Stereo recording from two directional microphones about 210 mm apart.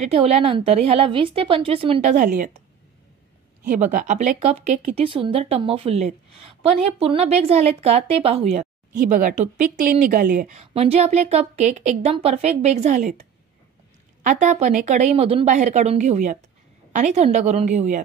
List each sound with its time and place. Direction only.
0.0 s a woman's voice: 30° right (ahead or behind)
3.7 s speech: 35° right (ahead or behind)